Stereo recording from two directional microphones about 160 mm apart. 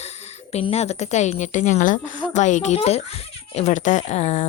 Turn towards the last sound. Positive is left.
turn(degrees=45)  # may be behind; listen again after turning